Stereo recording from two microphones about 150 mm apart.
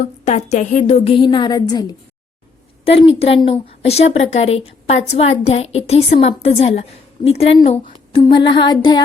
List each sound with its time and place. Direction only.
0.0 s a woman's voice: 50° left (ahead or behind); by 2.0 s 25° left (ahead or behind)
2.8 s a woman's voice: 40° left (ahead or behind)
8.1 s a sound: 30° left (ahead or behind)